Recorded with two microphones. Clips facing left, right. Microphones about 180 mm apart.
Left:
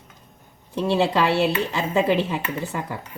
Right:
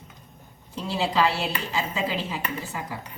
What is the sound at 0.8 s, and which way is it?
Speech, 65° left (ahead or behind).